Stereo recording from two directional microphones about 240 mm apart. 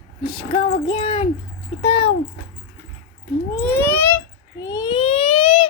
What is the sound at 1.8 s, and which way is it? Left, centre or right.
Speech, left.